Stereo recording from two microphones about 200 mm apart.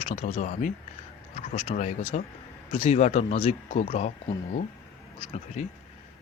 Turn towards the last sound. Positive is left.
turn(degrees=35)  # may be behind; listen again after turning